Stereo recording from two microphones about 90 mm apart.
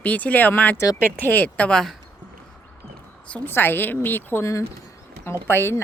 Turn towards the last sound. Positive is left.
turn(degrees=25)  # may be behind; listen again after turning